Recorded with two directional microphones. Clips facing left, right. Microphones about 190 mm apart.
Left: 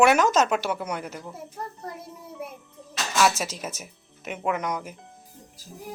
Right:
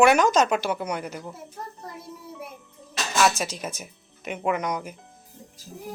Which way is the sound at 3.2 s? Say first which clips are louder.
Even; 5° left (ahead or behind).